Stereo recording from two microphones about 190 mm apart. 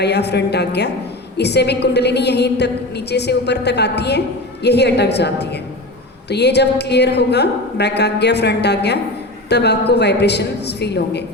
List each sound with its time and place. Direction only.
0.0 s a woman's voice: 60° left (ahead or behind)